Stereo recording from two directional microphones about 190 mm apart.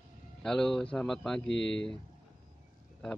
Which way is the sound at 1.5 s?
70° left (ahead or behind).